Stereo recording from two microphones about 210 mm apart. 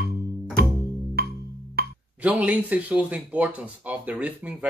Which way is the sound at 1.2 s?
45° right (ahead or behind).